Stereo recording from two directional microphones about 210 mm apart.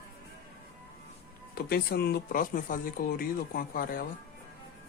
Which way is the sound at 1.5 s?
50° left (ahead or behind).